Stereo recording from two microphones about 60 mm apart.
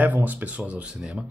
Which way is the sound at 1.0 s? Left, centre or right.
Centre.